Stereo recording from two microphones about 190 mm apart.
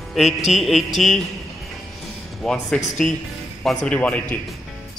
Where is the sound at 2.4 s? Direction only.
5° left (ahead or behind).